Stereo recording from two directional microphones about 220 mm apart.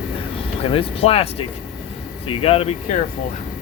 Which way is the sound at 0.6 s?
25° left (ahead or behind).